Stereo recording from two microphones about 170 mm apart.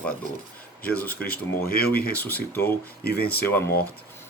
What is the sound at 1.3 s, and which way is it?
Speech, 65° left (ahead or behind).